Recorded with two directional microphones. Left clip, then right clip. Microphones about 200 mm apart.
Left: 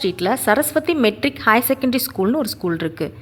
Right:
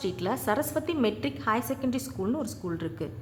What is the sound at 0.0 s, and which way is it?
A woman's voice, 30° left (ahead or behind).